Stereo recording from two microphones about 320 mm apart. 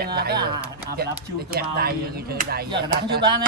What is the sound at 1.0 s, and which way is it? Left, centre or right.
Speech, right.